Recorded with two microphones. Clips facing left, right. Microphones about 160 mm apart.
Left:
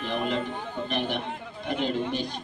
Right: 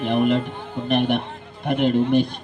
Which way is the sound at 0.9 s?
60° right (ahead or behind).